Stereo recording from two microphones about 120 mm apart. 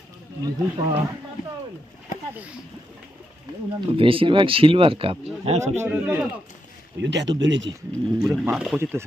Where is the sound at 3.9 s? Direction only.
50° right (ahead or behind).